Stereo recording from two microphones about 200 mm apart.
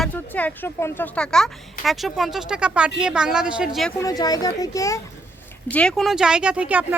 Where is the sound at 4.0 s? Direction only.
20° left (ahead or behind).